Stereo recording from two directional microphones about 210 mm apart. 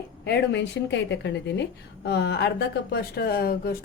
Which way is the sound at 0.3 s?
50° left (ahead or behind).